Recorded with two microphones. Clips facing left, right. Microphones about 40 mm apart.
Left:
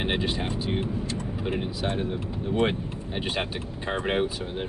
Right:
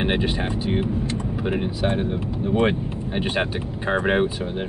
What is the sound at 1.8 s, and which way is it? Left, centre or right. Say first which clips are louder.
Speech: right 5 dB; right.